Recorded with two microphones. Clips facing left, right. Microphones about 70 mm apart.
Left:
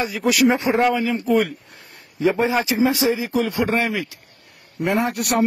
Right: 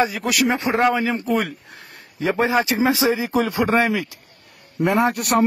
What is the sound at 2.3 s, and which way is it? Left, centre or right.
Speech, centre.